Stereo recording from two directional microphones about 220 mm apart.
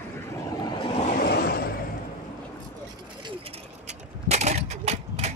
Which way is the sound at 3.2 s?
25° right (ahead or behind).